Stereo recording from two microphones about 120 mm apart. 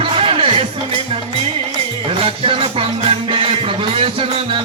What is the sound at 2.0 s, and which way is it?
Music, 50° right (ahead or behind).